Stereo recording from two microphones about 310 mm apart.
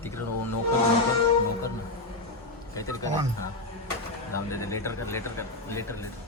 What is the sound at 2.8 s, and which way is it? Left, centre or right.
Speech, centre.